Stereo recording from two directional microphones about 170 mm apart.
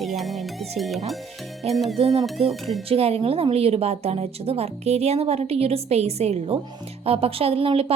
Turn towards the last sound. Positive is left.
turn(degrees=-35)  # may be behind; listen again after turning